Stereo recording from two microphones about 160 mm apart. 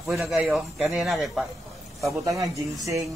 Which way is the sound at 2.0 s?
20° right (ahead or behind).